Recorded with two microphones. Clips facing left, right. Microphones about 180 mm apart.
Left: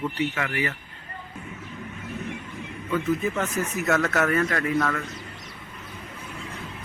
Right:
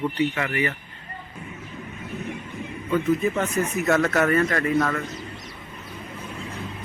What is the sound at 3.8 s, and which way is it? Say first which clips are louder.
Speech: right 2 dB; 5° right (ahead or behind).